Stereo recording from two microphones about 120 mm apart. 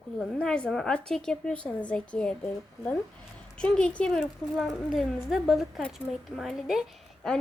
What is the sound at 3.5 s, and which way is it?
A woman's voice, 10° left (ahead or behind).